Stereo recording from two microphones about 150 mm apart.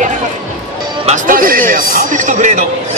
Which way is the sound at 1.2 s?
70° right (ahead or behind).